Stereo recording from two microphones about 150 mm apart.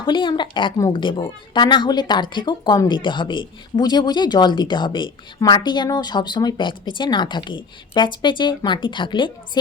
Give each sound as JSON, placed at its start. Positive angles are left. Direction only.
{"t": 0.0, "sound": "a woman's voice", "side_deg": 30}